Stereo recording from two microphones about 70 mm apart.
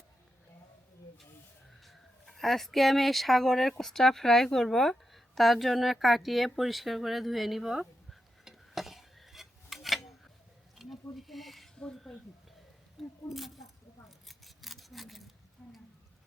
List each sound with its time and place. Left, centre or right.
1.8 s speech: centre
10.8 s a sound: centre
11.8 s speech: centre
13.2 s speech: centre
14.3 s scissors: centre
15.6 s a sound: centre